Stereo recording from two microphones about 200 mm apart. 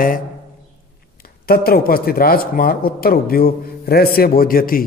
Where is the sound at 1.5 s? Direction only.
50° left (ahead or behind).